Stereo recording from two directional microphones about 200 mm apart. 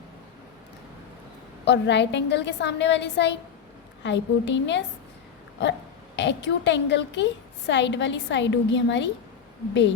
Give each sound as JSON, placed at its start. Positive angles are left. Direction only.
{"t": 1.6, "sound": "a woman's voice", "side_deg": 60}